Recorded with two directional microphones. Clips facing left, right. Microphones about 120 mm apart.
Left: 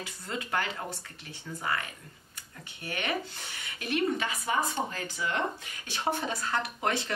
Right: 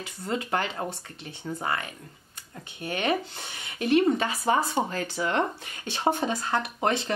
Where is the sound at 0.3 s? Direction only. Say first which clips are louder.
Right 5 dB; 25° right (ahead or behind).